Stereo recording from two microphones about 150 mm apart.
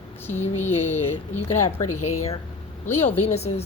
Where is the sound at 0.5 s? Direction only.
50° left (ahead or behind).